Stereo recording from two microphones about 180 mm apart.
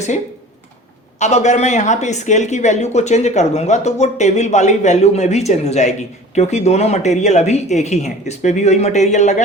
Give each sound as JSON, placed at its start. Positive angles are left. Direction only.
{"t": 1.2, "sound": "speech", "side_deg": 40}